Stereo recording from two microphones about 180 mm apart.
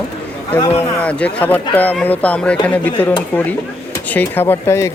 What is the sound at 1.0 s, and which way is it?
Speech, 5° left (ahead or behind).